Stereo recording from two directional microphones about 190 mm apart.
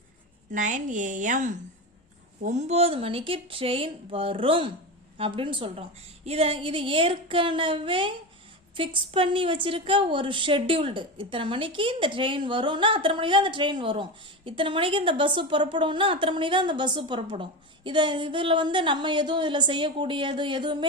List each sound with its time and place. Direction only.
0.5 s a woman's voice: 40° right (ahead or behind); by 20.7 s 25° right (ahead or behind)